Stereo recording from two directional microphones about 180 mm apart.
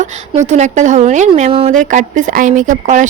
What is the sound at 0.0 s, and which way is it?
A woman's voice, 40° right (ahead or behind).